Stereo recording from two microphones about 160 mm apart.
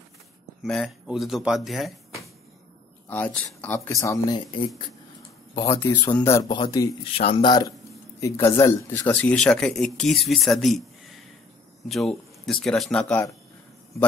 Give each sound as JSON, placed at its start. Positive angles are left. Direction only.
{"t": 0.6, "sound": "speech", "side_deg": 0}
{"t": 3.1, "sound": "speech", "side_deg": 10}
{"t": 5.5, "sound": "speech", "side_deg": 25}
{"t": 6.1, "sound": "speech", "side_deg": 15}